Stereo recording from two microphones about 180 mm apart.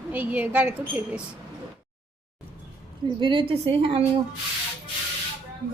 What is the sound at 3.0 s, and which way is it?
A woman's voice, 25° right (ahead or behind).